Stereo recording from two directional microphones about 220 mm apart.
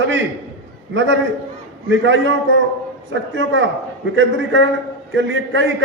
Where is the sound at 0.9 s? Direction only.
55° right (ahead or behind).